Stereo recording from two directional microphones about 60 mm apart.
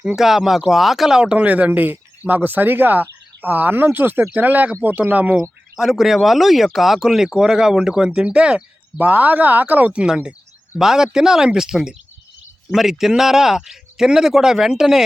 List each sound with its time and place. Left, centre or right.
0.2 s speech: centre
1.2 s speech: centre
5.4 s speech: centre
9.0 s speech: right
9.9 s speech: centre